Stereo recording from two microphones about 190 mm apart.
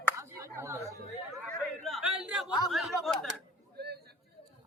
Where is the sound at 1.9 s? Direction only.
5° right (ahead or behind).